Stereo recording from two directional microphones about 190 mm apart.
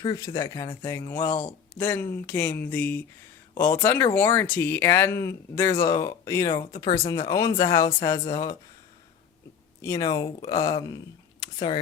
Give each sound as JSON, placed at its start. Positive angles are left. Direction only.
{"t": 0.0, "sound": "speech", "side_deg": 25}
{"t": 9.8, "sound": "speech", "side_deg": 15}